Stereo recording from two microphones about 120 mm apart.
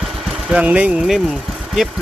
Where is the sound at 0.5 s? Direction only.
10° right (ahead or behind).